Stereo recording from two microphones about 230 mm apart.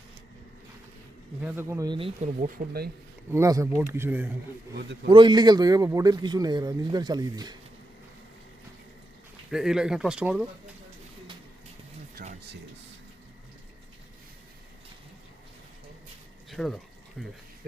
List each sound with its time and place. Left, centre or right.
1.4 s a man's voice: centre; by 2.5 s right
3.3 s a man's voice: centre
5.0 s a man's voice: centre
9.5 s speech: centre
12.1 s a sound: right
16.5 s a sound: centre
17.2 s speech: centre